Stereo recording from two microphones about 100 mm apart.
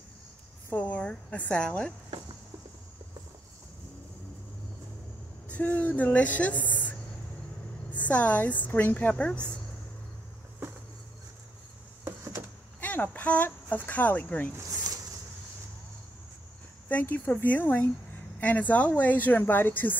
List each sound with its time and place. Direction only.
0.7 s a woman's voice: 15° left (ahead or behind)
5.5 s speech: 15° left (ahead or behind)
6.7 s a sound: 15° left (ahead or behind)
7.9 s speech: 15° left (ahead or behind)
12.0 s a sound: 25° right (ahead or behind)
12.8 s speech: 20° left (ahead or behind)
16.9 s speech: 20° left (ahead or behind)